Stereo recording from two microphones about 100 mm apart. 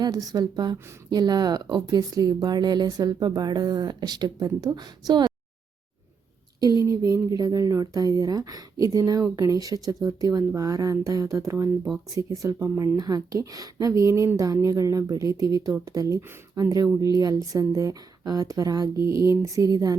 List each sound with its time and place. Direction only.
0.0 s speech: 40° right (ahead or behind)
6.8 s speech: 35° right (ahead or behind)